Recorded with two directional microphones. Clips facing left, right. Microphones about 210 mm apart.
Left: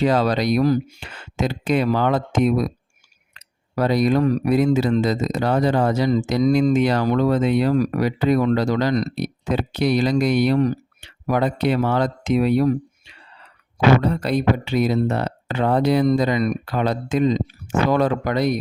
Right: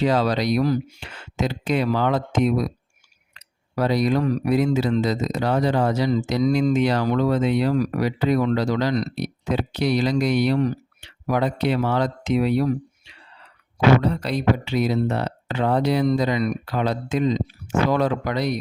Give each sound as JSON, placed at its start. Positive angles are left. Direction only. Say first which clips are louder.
{"t": 0.0, "sound": "speech", "louder": "left 2 dB", "side_deg": 50}
{"t": 14.0, "sound": "speech", "louder": "left 2 dB", "side_deg": 50}